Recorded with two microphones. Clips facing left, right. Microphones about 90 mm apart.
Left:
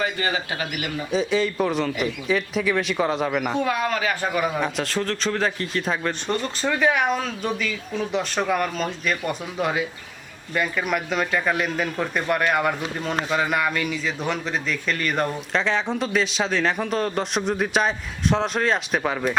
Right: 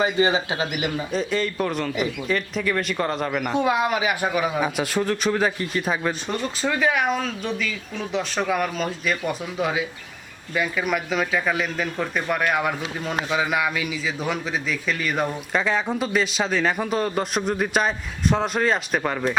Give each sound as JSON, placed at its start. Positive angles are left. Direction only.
{"t": 0.0, "sound": "a man's voice", "side_deg": -20}
{"t": 1.1, "sound": "speech", "side_deg": 0}
{"t": 3.6, "sound": "speech", "side_deg": -20}
{"t": 4.3, "sound": "speech", "side_deg": -5}